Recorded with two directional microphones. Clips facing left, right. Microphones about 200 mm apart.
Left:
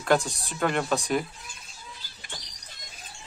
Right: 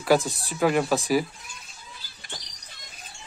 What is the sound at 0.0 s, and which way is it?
Speech, 5° right (ahead or behind).